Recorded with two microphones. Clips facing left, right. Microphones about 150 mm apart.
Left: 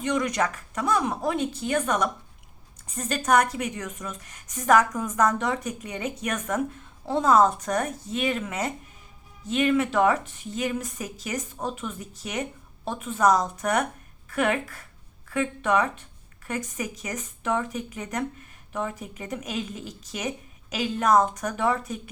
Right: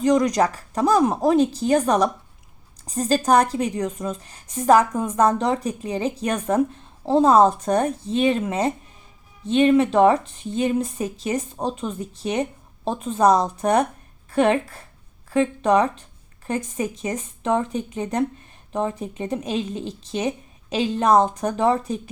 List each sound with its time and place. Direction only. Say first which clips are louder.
0.0 s speech: right 7 dB; 35° right (ahead or behind)